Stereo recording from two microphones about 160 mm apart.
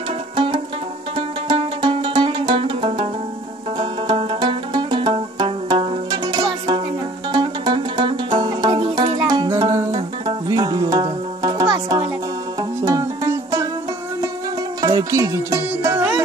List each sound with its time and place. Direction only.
1.1 s music: 30° right (ahead or behind)
14.8 s music: 25° right (ahead or behind)